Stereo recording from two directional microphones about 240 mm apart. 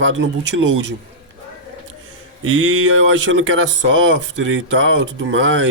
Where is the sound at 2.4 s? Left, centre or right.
Right.